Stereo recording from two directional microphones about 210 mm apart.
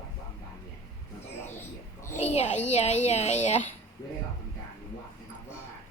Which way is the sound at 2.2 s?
30° left (ahead or behind).